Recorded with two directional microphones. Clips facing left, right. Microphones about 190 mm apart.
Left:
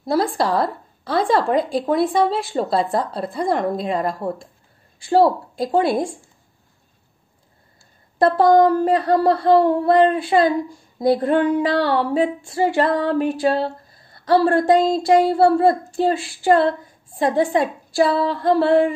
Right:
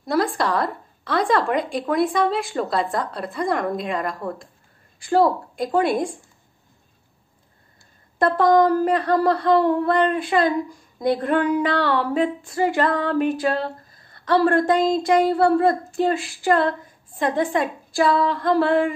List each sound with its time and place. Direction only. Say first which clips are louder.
0.0 s a woman's voice: left 2 dB; 30° left (ahead or behind)
8.2 s speech: left 3 dB; 30° left (ahead or behind)